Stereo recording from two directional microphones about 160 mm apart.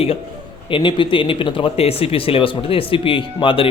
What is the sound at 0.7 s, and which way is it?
Speech, 30° left (ahead or behind).